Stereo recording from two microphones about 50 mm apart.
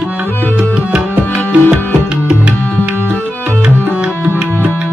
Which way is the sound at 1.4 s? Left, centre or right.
Left.